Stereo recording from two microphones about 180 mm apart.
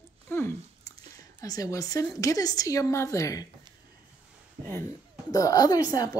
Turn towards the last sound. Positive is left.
turn(degrees=20)  # may be behind; listen again after turning